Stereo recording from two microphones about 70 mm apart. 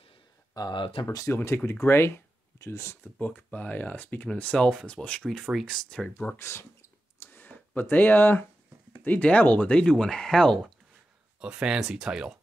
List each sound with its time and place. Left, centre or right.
0.6 s speech: left
1.0 s speech: left
3.0 s speech: left
5.4 s speech: centre
5.9 s speech: centre
6.1 s speech: left
7.2 s a sound: left
7.9 s speech: left; by 10.7 s centre
11.6 s speech: centre